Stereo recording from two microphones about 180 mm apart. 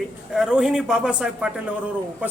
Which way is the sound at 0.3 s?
5° right (ahead or behind).